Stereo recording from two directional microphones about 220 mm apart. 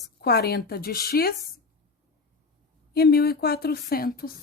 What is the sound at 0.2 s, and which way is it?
A woman's voice, 45° left (ahead or behind).